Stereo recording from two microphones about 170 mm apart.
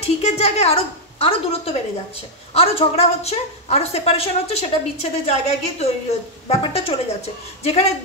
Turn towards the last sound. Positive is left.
turn(degrees=40)  # may be behind; listen again after turning